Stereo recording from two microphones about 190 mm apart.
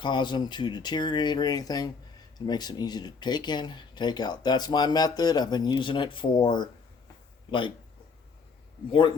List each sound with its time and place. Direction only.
0.0 s speech: 25° left (ahead or behind)
8.9 s speech: 25° left (ahead or behind)